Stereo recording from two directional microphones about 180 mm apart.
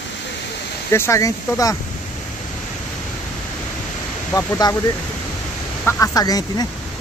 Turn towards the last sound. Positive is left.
turn(degrees=20)  # may be behind; listen again after turning